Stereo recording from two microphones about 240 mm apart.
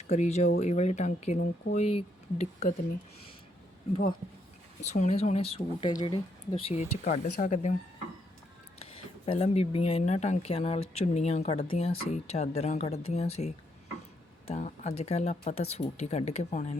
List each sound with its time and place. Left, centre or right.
0.1 s speech: left
4.9 s speech: left
8.8 s speech: left